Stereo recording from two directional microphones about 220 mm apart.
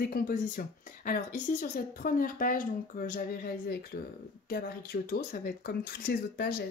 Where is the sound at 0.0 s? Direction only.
40° left (ahead or behind).